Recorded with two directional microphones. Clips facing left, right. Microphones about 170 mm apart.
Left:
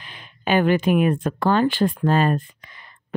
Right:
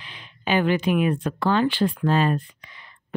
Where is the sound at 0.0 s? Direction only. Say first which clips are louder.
Left 3 dB; 50° left (ahead or behind).